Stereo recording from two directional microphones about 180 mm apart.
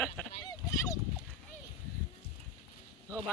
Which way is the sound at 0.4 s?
20° left (ahead or behind).